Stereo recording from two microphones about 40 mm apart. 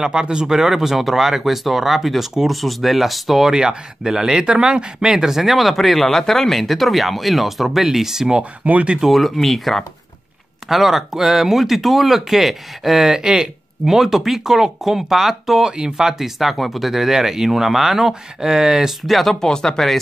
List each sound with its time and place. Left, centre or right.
0.0 s speech: centre
3.5 s speech: centre
5.1 s speech: centre
9.0 s speech: centre
10.7 s speech: centre
15.7 s speech: centre
16.1 s speech: centre
19.0 s speech: centre
19.4 s speech: centre